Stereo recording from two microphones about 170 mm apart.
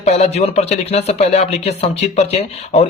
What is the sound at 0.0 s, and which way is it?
Speech, 40° left (ahead or behind).